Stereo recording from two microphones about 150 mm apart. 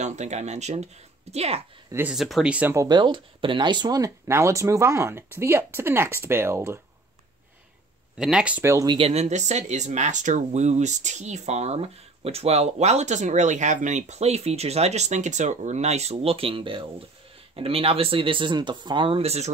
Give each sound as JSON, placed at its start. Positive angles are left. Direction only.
{"t": 0.0, "sound": "speech", "side_deg": -50}
{"t": 1.9, "sound": "speech", "side_deg": -15}
{"t": 2.1, "sound": "speech", "side_deg": 0}
{"t": 2.7, "sound": "speech", "side_deg": -25}
{"t": 8.2, "sound": "speech", "side_deg": -5}
{"t": 8.7, "sound": "speech", "side_deg": -30}